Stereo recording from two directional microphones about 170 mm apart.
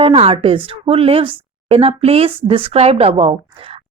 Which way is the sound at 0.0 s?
35° right (ahead or behind).